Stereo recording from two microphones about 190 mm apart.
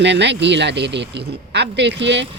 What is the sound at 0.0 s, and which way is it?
Speech, 65° right (ahead or behind).